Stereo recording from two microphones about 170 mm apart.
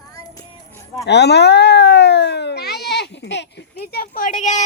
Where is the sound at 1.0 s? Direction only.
80° left.